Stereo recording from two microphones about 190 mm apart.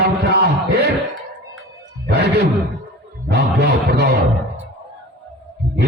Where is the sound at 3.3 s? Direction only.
60° right (ahead or behind).